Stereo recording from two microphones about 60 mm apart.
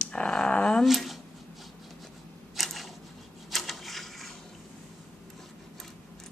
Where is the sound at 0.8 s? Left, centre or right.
Centre.